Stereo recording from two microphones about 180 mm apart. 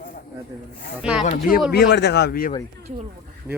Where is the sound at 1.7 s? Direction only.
65° left (ahead or behind).